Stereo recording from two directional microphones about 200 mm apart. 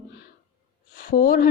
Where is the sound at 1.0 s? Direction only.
45° left (ahead or behind).